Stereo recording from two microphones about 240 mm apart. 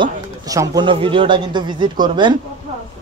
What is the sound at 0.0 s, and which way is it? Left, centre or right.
Speech, centre.